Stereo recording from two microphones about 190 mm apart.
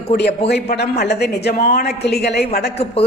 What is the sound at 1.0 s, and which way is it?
A woman's voice, 60° left (ahead or behind).